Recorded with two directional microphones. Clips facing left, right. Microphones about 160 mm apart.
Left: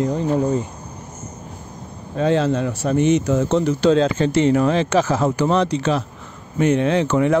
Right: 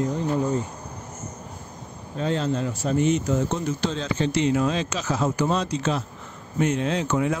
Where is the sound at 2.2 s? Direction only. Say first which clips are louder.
Left 7 dB; 85° left.